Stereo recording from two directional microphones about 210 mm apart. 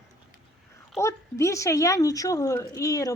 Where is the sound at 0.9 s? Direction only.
15° left (ahead or behind).